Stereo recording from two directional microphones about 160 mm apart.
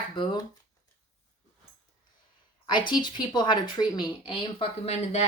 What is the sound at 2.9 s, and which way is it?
Speech, 30° left (ahead or behind).